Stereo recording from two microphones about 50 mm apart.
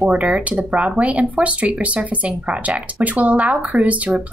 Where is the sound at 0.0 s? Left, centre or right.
Right.